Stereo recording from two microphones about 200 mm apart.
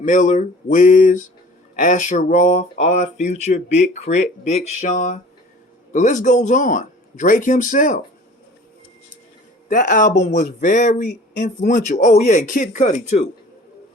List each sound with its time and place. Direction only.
0.0 s speech: 40° left (ahead or behind)
9.6 s speech: 40° left (ahead or behind)